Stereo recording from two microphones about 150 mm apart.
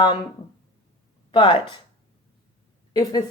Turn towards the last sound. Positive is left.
turn(degrees=25)  # may be behind; listen again after turning